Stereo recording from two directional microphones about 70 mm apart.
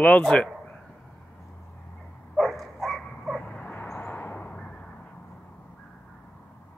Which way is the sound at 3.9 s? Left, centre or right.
Left.